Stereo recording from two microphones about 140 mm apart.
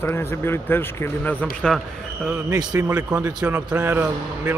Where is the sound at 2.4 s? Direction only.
30° right (ahead or behind).